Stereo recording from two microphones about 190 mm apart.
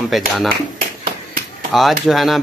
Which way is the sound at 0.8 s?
50° right (ahead or behind).